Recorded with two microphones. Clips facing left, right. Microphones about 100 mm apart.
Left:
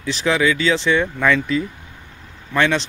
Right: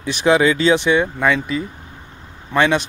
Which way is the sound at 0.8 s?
15° right (ahead or behind).